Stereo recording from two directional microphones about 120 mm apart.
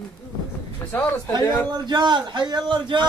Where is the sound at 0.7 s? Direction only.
15° left (ahead or behind).